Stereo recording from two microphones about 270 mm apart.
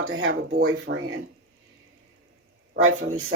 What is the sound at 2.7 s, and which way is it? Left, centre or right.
Speech, right.